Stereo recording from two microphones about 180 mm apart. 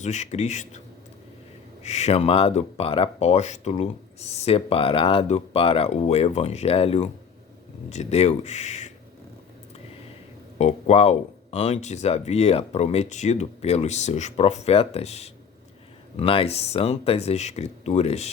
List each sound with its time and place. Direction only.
0.0 s speech: 40° left (ahead or behind)
1.8 s speech: 40° left (ahead or behind)
10.6 s speech: 35° left (ahead or behind)